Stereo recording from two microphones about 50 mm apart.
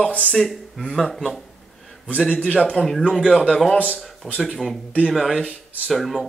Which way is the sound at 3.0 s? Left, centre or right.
Centre.